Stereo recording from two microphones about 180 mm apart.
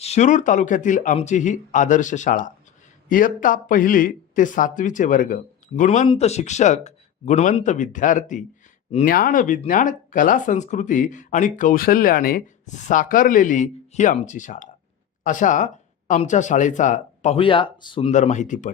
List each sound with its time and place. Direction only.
0.0 s speech: 40° left (ahead or behind)
17.3 s speech: 30° left (ahead or behind)
18.1 s speech: 40° left (ahead or behind)